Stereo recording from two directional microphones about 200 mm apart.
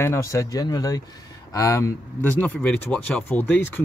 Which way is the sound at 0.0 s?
15° left (ahead or behind).